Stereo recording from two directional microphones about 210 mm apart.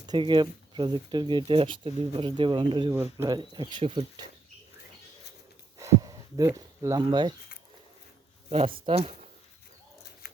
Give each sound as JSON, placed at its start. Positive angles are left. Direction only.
{"t": 0.0, "sound": "speech", "side_deg": -20}
{"t": 5.8, "sound": "a sound", "side_deg": -15}
{"t": 7.0, "sound": "speech", "side_deg": -20}
{"t": 8.4, "sound": "speech", "side_deg": -25}